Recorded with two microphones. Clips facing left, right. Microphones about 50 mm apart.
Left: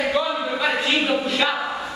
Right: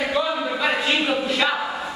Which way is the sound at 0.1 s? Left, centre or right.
Centre.